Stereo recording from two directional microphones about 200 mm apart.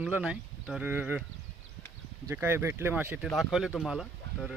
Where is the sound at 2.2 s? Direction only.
10° right (ahead or behind).